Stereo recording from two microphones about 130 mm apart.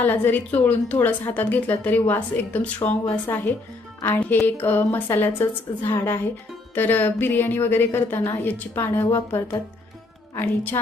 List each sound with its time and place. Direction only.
0.0 s a woman's voice: 15° left (ahead or behind)
10.3 s a woman's voice: 15° left (ahead or behind)